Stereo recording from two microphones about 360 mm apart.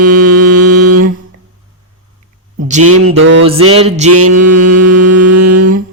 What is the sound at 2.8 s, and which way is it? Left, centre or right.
Mantra, right.